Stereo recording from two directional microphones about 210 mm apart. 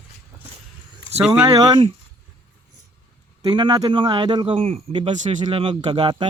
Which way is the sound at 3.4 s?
20° right (ahead or behind).